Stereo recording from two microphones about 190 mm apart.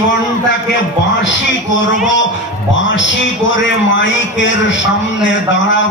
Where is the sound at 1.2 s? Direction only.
80° left.